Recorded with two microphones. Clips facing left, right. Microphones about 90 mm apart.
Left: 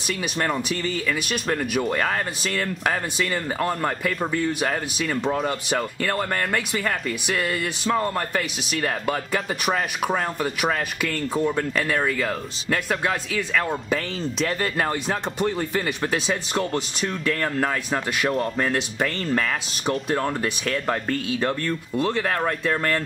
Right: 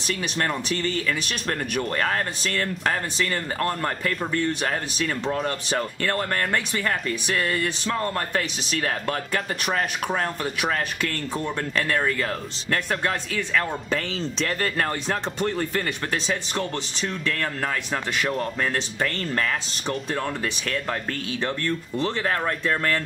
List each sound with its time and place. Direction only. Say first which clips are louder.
0.1 s speech: left 1 dB; 5° left (ahead or behind)